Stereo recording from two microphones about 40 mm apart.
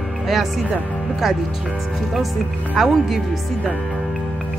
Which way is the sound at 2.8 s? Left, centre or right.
Centre.